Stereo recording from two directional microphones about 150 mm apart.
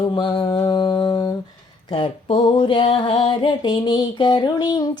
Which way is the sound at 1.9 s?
35° left (ahead or behind).